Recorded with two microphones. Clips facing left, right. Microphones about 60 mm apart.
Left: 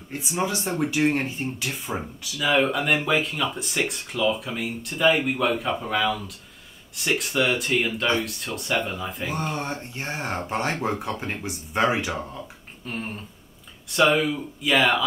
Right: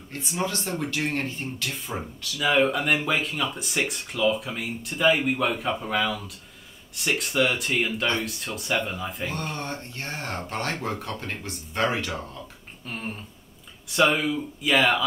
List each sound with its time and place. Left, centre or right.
0.1 s speech: centre
2.3 s speech: centre
9.3 s speech: centre
12.8 s speech: centre